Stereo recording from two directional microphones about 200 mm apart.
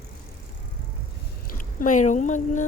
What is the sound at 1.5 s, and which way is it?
Speech, 40° left (ahead or behind).